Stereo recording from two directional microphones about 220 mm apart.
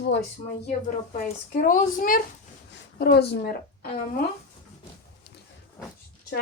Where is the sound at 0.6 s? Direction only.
35° left (ahead or behind).